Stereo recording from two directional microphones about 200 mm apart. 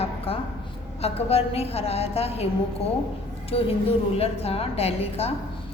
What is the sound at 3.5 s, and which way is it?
A woman's voice, 30° left (ahead or behind).